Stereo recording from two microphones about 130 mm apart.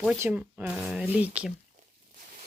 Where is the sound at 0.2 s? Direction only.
15° right (ahead or behind).